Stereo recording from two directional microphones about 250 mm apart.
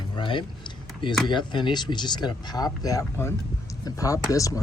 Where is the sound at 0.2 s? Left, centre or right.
Centre.